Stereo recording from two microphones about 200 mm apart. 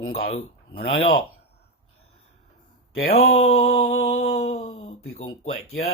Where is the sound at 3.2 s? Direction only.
90° left.